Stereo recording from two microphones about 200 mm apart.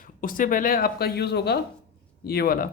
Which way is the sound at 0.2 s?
45° left (ahead or behind).